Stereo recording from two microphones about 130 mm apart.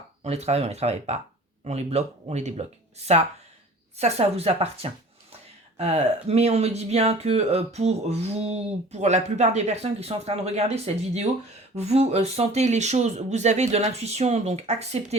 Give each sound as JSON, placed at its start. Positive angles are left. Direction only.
{"t": 0.2, "sound": "a woman's voice", "side_deg": -55}